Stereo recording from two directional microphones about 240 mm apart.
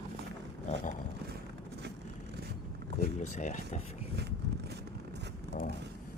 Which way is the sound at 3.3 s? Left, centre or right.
Left.